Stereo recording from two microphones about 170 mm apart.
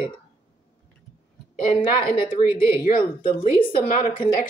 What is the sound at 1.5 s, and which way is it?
Speech, 55° left (ahead or behind).